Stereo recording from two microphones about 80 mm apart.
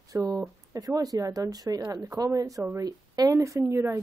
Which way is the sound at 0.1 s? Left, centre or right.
Right.